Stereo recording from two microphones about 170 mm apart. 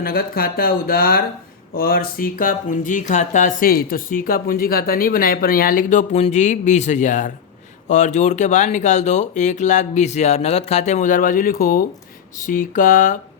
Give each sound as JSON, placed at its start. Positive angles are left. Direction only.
{"t": 0.0, "sound": "speech", "side_deg": 60}